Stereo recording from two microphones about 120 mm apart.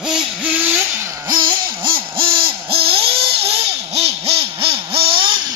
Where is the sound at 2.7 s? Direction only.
50° right (ahead or behind).